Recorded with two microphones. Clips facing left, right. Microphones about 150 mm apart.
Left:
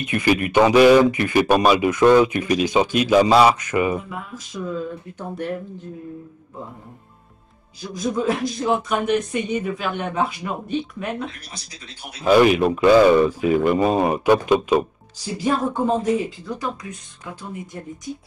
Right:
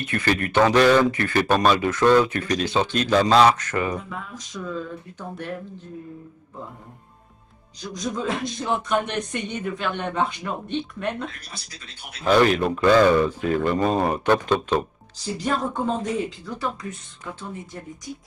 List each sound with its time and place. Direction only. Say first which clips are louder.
0.0 s speech: left 4 dB; 15° left (ahead or behind)
7.9 s speech: left 5 dB; 5° left (ahead or behind)